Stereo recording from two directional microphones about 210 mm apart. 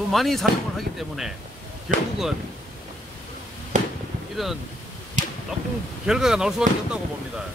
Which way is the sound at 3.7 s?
35° right (ahead or behind).